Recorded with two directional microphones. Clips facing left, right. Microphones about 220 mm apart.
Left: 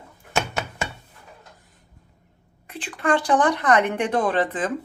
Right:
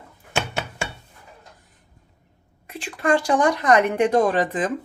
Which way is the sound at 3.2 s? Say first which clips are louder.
Even; 10° right (ahead or behind).